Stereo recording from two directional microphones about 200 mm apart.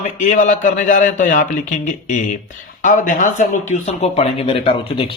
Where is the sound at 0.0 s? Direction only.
35° left (ahead or behind).